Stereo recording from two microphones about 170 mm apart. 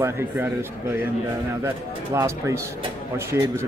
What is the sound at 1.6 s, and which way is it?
A man's voice, 15° right (ahead or behind).